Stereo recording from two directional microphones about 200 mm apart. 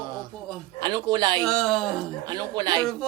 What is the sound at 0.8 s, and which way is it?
Speech, 20° right (ahead or behind).